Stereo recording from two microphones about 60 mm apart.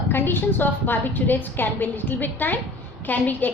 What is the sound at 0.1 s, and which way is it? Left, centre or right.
A woman's voice, left.